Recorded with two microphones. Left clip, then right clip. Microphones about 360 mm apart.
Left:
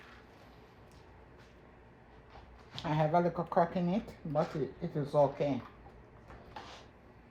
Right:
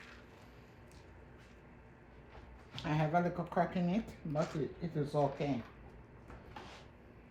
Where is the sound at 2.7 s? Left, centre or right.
Centre.